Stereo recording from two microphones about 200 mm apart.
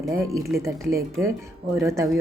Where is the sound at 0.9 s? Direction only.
15° right (ahead or behind).